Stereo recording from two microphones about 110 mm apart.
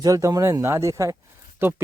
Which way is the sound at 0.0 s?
30° right (ahead or behind).